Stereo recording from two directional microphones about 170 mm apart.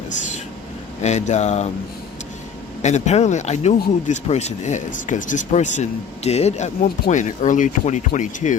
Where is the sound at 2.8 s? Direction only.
45° left (ahead or behind).